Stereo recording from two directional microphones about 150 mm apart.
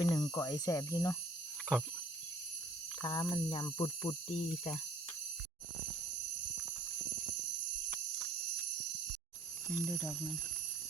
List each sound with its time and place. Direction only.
0.0 s speech: 25° left (ahead or behind)
3.0 s speech: 30° left (ahead or behind)
9.8 s speech: 10° left (ahead or behind)